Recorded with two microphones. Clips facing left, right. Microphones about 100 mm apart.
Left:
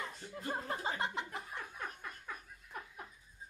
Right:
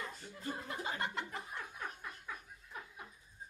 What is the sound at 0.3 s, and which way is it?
Speech, 60° left (ahead or behind).